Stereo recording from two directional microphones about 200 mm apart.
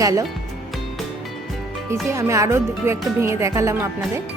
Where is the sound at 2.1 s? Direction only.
15° right (ahead or behind).